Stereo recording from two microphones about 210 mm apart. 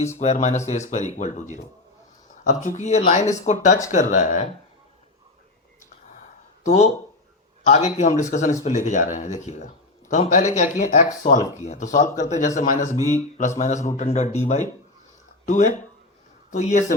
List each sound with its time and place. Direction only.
0.2 s speech: 35° left (ahead or behind)
6.7 s speech: 30° left (ahead or behind)